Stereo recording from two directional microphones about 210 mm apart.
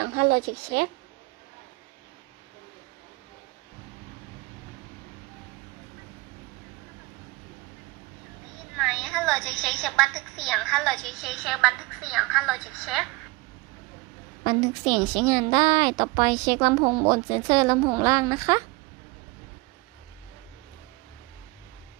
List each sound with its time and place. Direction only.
0.0 s a woman's voice: 50° right (ahead or behind)
8.7 s a woman's voice: centre (ahead or behind)
14.4 s a woman's voice: 20° right (ahead or behind)